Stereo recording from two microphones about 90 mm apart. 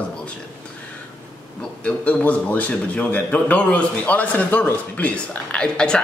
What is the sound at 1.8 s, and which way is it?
A man's voice, 15° left (ahead or behind).